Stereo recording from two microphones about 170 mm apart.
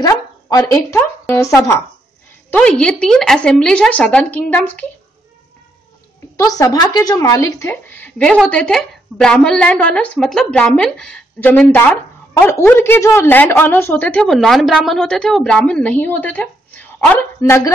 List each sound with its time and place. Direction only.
0.0 s speech: 20° left (ahead or behind)
6.3 s speech: 20° left (ahead or behind)